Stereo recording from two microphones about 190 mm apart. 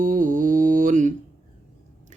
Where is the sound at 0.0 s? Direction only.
45° right (ahead or behind).